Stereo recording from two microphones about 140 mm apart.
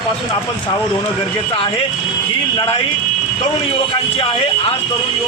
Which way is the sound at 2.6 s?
35° left (ahead or behind).